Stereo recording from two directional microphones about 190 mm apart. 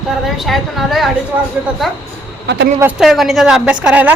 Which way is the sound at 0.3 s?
Centre (ahead or behind).